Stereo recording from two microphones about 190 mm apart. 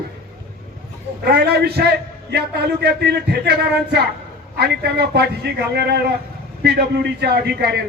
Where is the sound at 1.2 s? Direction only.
60° right (ahead or behind).